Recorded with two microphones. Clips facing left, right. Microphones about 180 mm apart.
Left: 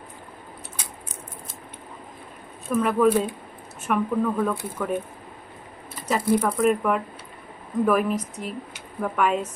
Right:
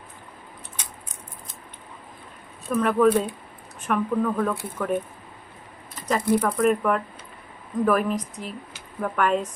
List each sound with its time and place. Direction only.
2.6 s speech: 5° left (ahead or behind)
6.1 s speech: 5° left (ahead or behind)